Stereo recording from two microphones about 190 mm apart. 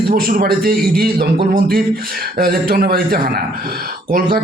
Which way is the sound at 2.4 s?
50° right (ahead or behind).